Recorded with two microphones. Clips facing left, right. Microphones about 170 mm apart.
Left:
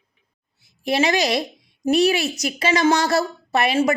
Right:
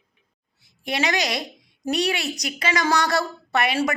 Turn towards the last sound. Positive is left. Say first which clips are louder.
# left 3 dB
turn(degrees=25)  # may be behind; listen again after turning